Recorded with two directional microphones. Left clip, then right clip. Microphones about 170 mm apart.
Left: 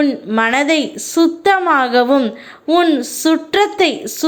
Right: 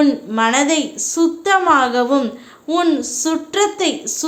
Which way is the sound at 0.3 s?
25° left (ahead or behind).